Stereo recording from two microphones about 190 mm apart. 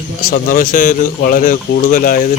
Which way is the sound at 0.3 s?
45° left (ahead or behind).